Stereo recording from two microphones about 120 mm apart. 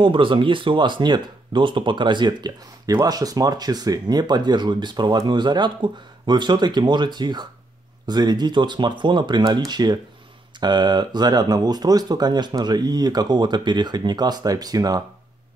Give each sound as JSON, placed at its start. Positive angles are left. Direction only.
{"t": 0.0, "sound": "speech", "side_deg": -45}